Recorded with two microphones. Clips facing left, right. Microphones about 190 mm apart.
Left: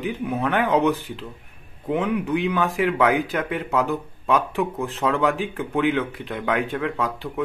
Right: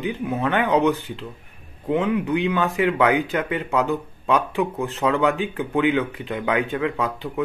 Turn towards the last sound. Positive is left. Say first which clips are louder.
# right 1 dB
turn(degrees=0)  # may be behind; listen again after turning